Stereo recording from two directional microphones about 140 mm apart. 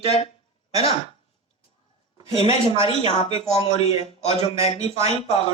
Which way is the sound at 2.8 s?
45° left (ahead or behind).